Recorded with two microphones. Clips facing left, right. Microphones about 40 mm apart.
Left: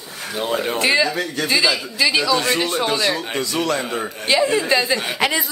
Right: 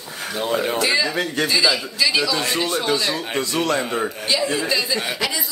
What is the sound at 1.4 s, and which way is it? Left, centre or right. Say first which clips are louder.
Speech: left 1 dB; centre.